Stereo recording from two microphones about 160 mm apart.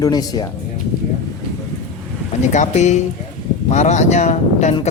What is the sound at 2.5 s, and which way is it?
A man's voice, 45° left (ahead or behind).